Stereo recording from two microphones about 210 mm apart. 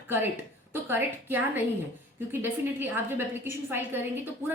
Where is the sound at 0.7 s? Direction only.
10° right (ahead or behind).